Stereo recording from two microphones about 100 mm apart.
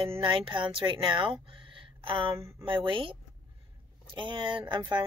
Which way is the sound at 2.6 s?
60° right (ahead or behind).